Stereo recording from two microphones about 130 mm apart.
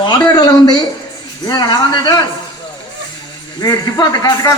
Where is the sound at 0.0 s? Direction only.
35° left (ahead or behind).